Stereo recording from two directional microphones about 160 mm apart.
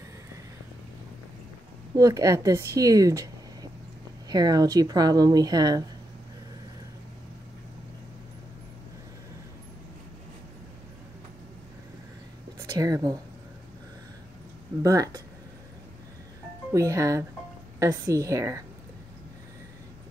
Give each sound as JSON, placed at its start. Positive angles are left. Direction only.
{"t": 2.0, "sound": "a woman's voice", "side_deg": -20}
{"t": 4.3, "sound": "a woman's voice", "side_deg": -25}
{"t": 12.7, "sound": "a woman's voice", "side_deg": -20}
{"t": 14.8, "sound": "a woman's voice", "side_deg": -20}
{"t": 16.7, "sound": "a woman's voice", "side_deg": -20}